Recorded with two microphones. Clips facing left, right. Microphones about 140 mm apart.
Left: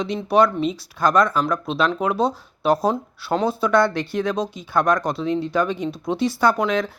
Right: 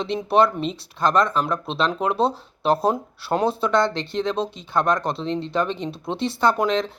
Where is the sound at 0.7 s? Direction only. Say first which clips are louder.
Left 1 dB; 25° right (ahead or behind).